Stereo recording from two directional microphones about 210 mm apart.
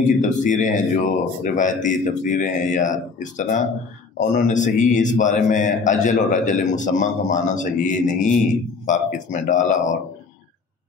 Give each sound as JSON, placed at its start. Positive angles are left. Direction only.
{"t": 0.0, "sound": "speech", "side_deg": 35}